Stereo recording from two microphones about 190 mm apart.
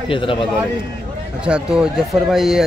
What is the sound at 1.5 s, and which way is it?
Speech, 5° right (ahead or behind).